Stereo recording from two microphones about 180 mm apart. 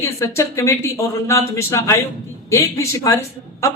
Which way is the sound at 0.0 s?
15° left (ahead or behind).